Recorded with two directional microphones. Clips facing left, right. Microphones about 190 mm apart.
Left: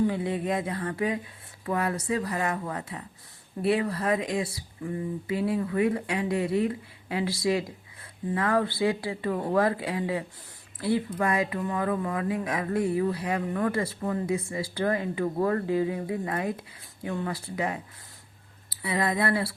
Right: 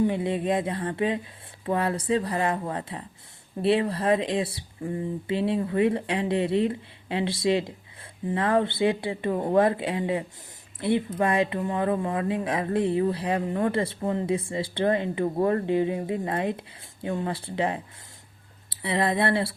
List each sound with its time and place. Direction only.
0.0 s speech: 25° right (ahead or behind)